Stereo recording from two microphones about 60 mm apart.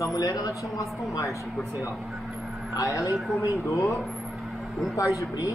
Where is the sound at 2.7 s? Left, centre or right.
Left.